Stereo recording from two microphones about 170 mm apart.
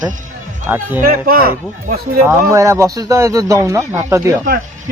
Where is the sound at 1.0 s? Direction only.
60° right (ahead or behind).